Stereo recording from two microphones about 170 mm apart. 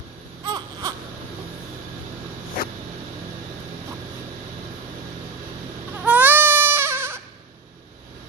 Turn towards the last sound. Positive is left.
turn(degrees=-15)  # may be behind; listen again after turning